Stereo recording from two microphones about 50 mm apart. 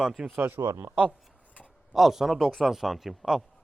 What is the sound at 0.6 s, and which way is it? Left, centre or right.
Speech, right.